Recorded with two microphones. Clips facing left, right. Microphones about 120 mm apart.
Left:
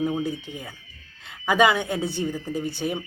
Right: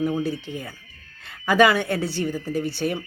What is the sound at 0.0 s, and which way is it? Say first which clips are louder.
A woman's voice: right 1 dB; 20° left (ahead or behind).